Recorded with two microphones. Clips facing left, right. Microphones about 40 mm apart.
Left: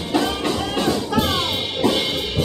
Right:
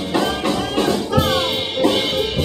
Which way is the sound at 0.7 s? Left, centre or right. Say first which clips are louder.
Right 2 dB; centre.